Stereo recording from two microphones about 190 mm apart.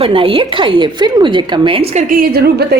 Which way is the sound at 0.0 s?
30° right (ahead or behind).